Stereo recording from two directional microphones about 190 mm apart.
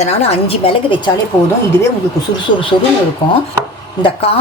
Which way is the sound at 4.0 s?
25° left (ahead or behind).